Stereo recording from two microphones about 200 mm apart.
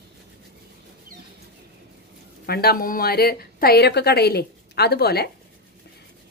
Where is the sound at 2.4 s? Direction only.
50° left (ahead or behind).